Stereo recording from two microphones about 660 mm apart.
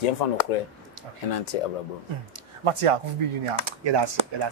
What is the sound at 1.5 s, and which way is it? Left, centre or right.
Speech, left.